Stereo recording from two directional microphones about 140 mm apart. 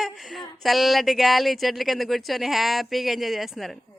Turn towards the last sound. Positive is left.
turn(degrees=0)  # may be behind; listen again after turning